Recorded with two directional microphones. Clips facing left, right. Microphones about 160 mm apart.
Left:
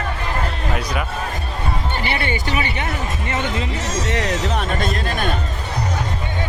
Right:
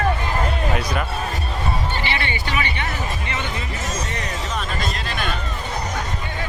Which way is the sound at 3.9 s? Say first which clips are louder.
Left 9 dB; 90° left.